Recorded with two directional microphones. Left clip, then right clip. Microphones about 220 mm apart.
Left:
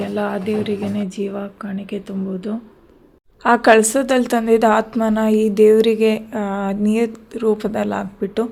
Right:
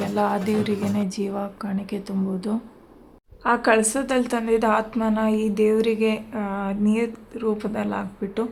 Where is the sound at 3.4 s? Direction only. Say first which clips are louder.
Left 7 dB; 25° left (ahead or behind).